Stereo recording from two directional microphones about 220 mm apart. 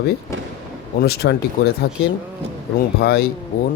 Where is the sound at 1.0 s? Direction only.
45° left (ahead or behind).